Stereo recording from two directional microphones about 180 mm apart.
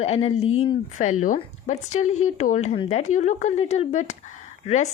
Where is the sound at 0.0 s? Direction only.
35° left (ahead or behind).